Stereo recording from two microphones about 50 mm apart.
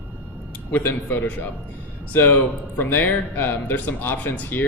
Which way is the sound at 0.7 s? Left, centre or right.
Left.